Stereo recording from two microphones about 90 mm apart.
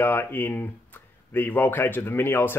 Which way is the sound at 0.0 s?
25° left (ahead or behind).